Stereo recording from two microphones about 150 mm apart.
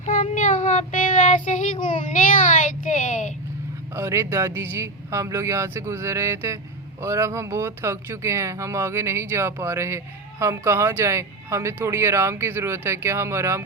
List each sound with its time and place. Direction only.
0.0 s child singing: 60° left (ahead or behind)
3.9 s speech: 15° right (ahead or behind)